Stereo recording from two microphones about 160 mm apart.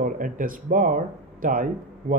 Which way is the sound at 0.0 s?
55° right (ahead or behind).